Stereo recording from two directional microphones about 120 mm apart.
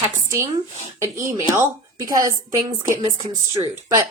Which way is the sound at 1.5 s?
25° right (ahead or behind).